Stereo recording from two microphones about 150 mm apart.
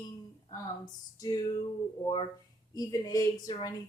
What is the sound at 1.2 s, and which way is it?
Speech, 25° left (ahead or behind).